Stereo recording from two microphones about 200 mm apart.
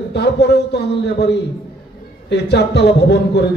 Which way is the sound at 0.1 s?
55° left (ahead or behind).